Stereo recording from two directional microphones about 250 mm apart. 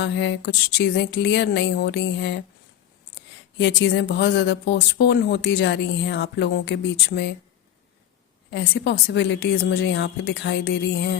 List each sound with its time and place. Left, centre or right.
0.0 s speech: left
3.6 s speech: left
8.4 s speech: left